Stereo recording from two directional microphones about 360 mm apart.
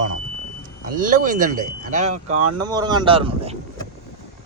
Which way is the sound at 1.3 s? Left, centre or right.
Right.